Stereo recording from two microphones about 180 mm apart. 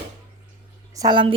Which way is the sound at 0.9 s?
20° right (ahead or behind).